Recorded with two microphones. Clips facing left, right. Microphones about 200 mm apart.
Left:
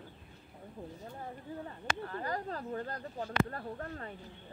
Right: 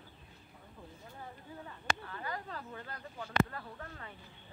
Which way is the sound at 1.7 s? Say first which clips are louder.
Right 1 dB; 40° left (ahead or behind).